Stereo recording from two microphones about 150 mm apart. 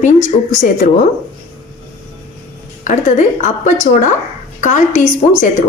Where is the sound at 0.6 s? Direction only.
65° left (ahead or behind).